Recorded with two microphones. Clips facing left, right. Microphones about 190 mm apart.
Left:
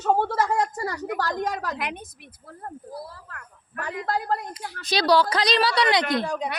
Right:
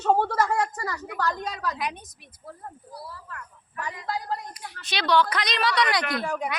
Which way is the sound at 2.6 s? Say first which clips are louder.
Left 7 dB; 50° left (ahead or behind).